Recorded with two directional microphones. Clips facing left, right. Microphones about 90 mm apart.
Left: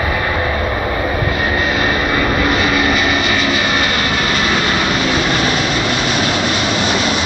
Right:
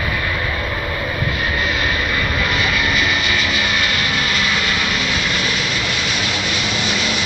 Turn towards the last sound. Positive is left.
turn(degrees=35)  # may be behind; listen again after turning